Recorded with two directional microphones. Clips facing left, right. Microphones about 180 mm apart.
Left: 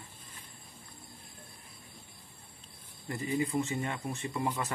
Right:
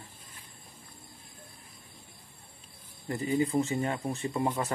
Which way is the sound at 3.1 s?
30° right (ahead or behind).